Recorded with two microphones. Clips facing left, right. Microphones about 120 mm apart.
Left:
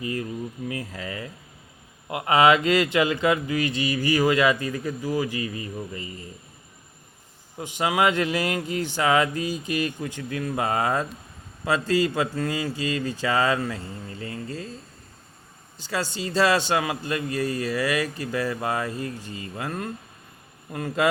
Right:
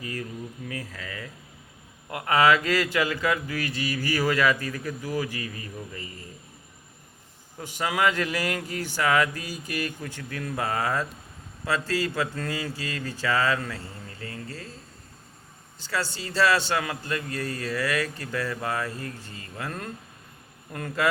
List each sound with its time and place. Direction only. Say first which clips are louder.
0.0 s mantra: left 5 dB; 20° left (ahead or behind)
2.0 s speech: left 4 dB; 10° left (ahead or behind)
2.3 s mantra: left 3 dB; 20° left (ahead or behind)
7.9 s mantra: left 3 dB; 20° left (ahead or behind)
15.8 s a man's voice: left 2 dB; 20° left (ahead or behind)